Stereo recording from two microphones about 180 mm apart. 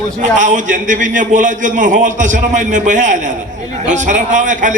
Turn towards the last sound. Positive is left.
turn(degrees=-45)  # may be behind; listen again after turning